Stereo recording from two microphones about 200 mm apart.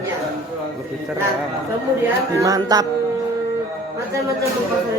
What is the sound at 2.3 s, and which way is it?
Music, 15° right (ahead or behind).